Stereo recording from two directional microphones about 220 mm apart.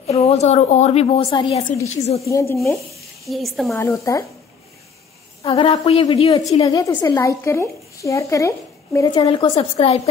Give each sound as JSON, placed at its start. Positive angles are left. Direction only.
{"t": 0.0, "sound": "a woman's voice", "side_deg": 30}
{"t": 2.2, "sound": "a woman's voice", "side_deg": 15}
{"t": 2.6, "sound": "speech", "side_deg": 0}
{"t": 3.7, "sound": "a woman's voice", "side_deg": 10}
{"t": 5.4, "sound": "a woman's voice", "side_deg": 25}